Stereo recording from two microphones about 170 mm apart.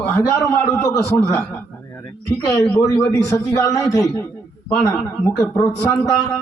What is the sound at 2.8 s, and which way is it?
A man's voice, 20° left (ahead or behind).